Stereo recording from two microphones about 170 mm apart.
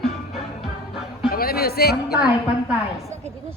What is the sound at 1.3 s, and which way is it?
Music, 60° left (ahead or behind).